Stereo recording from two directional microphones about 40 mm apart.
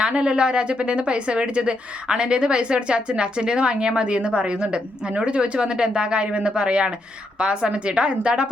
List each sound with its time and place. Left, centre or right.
0.0 s a woman's voice: right